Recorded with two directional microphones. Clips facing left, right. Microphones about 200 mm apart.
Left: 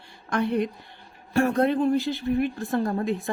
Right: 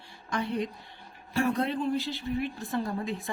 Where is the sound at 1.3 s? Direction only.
50° left (ahead or behind).